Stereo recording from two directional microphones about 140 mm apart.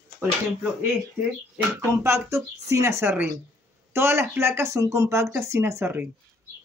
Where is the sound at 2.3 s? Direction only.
20° right (ahead or behind).